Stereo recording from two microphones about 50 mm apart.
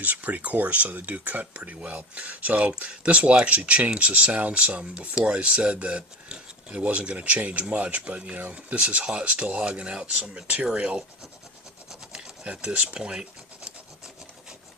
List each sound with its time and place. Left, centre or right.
0.0 s speech: right
1.7 s speech: right
12.1 s speech: centre